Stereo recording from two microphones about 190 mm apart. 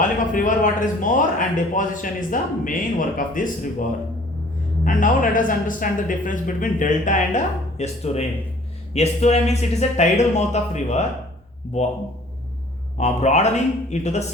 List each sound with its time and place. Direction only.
0.0 s a man's voice: 40° left (ahead or behind)
13.0 s speech: 35° left (ahead or behind)